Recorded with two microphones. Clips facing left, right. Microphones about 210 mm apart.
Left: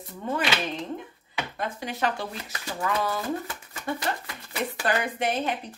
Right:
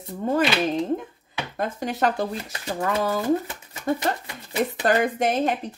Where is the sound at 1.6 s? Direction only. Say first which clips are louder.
Right 6 dB; 40° right (ahead or behind).